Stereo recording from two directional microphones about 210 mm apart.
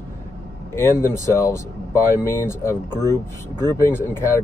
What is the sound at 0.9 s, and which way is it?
Speech, 15° left (ahead or behind).